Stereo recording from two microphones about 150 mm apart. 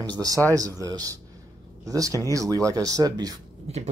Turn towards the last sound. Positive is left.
turn(degrees=-45)  # may be behind; listen again after turning